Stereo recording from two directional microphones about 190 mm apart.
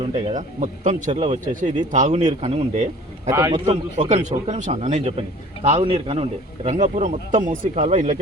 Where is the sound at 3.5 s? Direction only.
35° right (ahead or behind).